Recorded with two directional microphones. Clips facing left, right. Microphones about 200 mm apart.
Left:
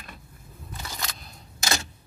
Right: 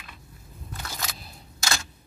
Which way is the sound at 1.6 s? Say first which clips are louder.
Left 2 dB; 20° left (ahead or behind).